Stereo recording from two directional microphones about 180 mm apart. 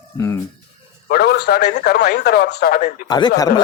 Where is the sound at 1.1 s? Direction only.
65° left (ahead or behind).